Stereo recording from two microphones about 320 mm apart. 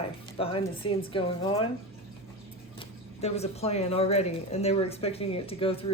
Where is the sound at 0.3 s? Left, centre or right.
Centre.